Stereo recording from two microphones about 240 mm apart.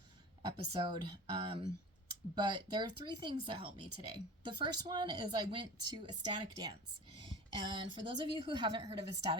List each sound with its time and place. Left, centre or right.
0.4 s speech: right